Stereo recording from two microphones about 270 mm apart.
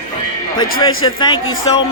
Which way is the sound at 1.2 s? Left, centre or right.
Centre.